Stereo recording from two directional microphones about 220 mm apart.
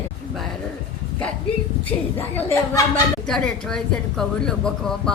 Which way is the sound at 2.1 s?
10° left (ahead or behind).